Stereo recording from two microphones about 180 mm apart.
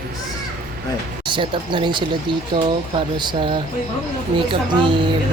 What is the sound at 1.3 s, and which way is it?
Speech, 25° right (ahead or behind).